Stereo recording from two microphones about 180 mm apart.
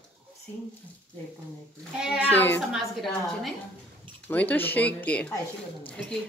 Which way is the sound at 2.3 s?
10° left (ahead or behind).